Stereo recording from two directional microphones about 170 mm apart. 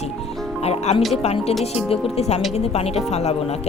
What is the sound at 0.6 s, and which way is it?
A woman's voice, 40° left (ahead or behind).